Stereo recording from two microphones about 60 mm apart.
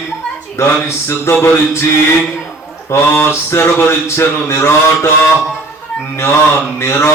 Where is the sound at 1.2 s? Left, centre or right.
Left.